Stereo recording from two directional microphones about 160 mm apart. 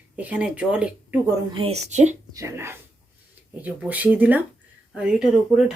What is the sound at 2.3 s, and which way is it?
Speech, 15° right (ahead or behind).